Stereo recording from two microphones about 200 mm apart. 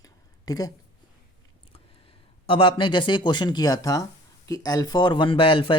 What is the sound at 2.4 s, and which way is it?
A man's voice, 25° left (ahead or behind).